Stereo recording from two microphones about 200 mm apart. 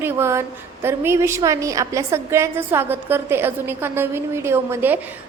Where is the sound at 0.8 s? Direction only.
10° right (ahead or behind).